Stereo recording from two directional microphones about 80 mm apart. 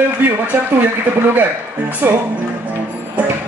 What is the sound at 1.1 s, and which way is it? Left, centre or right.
Speech, right.